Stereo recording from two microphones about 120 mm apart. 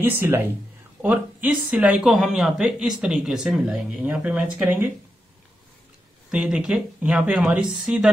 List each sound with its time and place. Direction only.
0.0 s speech: 20° right (ahead or behind)
6.3 s speech: 5° right (ahead or behind)